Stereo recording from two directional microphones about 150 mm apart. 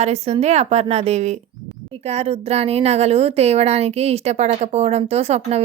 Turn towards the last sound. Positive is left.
turn(degrees=-45)  # may be behind; listen again after turning